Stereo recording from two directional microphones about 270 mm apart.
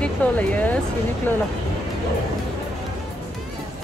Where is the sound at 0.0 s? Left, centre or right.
Centre.